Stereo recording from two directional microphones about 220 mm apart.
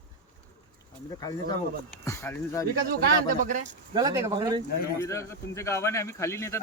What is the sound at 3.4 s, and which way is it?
Speech, 35° right (ahead or behind).